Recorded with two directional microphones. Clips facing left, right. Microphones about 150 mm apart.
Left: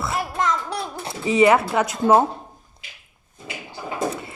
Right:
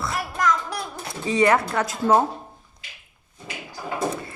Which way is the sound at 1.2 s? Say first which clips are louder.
Left 3 dB; 15° left (ahead or behind).